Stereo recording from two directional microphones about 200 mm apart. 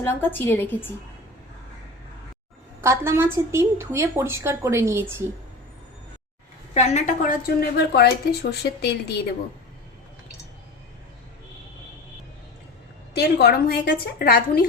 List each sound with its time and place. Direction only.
0.0 s a woman's voice: 10° left (ahead or behind)
2.8 s a woman's voice: 15° right (ahead or behind)
6.7 s a woman's voice: 35° left (ahead or behind); by 9.1 s 55° left (ahead or behind)
13.1 s a woman's voice: 55° left (ahead or behind)